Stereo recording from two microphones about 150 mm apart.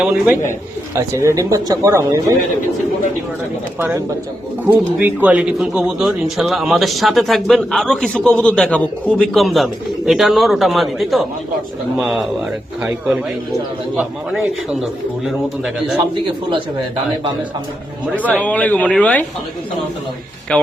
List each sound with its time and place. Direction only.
0.0 s speech: 10° right (ahead or behind)
0.9 s speech: 20° right (ahead or behind)
3.8 s speech: 15° right (ahead or behind)
15.2 s speech: 5° right (ahead or behind)
18.2 s speech: 10° left (ahead or behind)
20.5 s speech: 5° left (ahead or behind)